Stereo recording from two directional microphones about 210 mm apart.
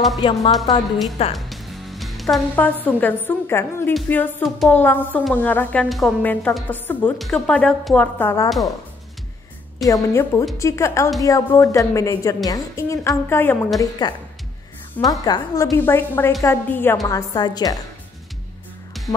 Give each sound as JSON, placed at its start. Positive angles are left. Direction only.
{"t": 0.2, "sound": "a woman's voice", "side_deg": 25}
{"t": 1.3, "sound": "a woman's voice", "side_deg": 0}
{"t": 9.8, "sound": "a woman's voice", "side_deg": 15}
{"t": 18.9, "sound": "music", "side_deg": 0}